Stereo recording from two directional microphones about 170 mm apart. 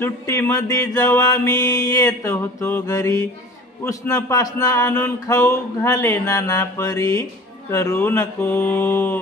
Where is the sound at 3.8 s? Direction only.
20° left (ahead or behind).